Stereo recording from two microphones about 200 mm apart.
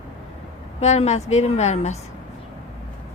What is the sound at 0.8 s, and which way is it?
Speech, 35° left (ahead or behind).